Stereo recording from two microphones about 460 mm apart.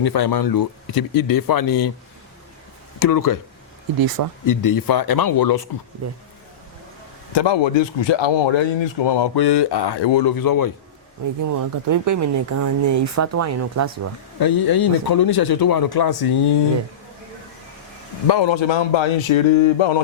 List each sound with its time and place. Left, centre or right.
0.0 s a man's voice: left
3.0 s a man's voice: left
4.4 s a man's voice: left
7.3 s speech: left
10.3 s a man's voice: left
11.4 s speech: right
14.3 s a man's voice: left
18.3 s speech: left